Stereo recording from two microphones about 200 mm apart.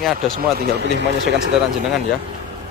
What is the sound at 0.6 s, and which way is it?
Speech, 60° right (ahead or behind).